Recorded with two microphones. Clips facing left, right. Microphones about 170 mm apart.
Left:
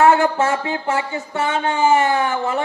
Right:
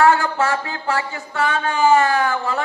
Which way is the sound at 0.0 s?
25° left (ahead or behind).